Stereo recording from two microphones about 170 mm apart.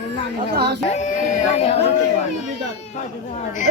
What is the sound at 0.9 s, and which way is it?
Speech, 45° left (ahead or behind).